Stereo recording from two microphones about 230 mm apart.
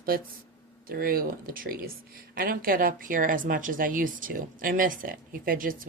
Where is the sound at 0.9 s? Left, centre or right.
Right.